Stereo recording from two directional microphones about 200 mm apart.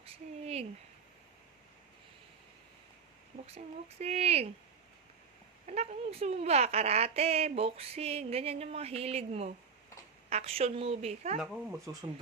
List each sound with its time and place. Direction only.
0.0 s a sound: 30° right (ahead or behind)
3.4 s a woman's voice: 30° right (ahead or behind)
5.6 s a woman's voice: 35° right (ahead or behind)
11.9 s speech: 15° right (ahead or behind)